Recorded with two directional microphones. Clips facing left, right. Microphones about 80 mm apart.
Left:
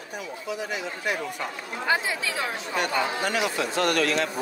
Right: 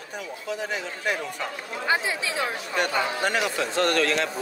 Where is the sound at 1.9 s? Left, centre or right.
Right.